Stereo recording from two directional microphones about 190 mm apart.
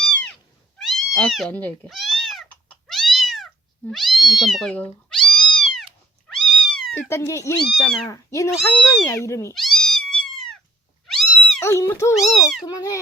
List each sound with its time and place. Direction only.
0.0 s cat: 5° left (ahead or behind)
7.1 s speech: 15° left (ahead or behind)
9.6 s cat: centre (ahead or behind)
11.6 s speech: 15° left (ahead or behind)
12.1 s speech: centre (ahead or behind)
12.6 s a sound: 20° left (ahead or behind)